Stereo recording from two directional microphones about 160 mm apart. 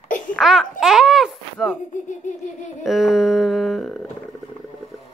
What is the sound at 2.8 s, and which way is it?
Humming, centre (ahead or behind).